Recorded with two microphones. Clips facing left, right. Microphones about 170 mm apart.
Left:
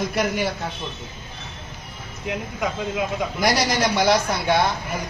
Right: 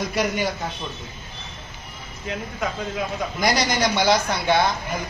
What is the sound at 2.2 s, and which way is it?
A man's voice, 15° left (ahead or behind).